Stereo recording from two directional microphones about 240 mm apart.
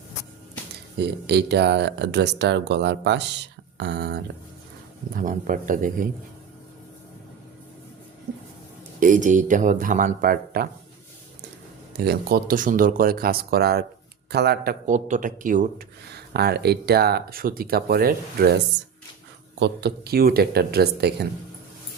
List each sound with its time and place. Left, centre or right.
0.9 s speech: right
5.1 s speech: right
9.0 s speech: right
11.9 s speech: right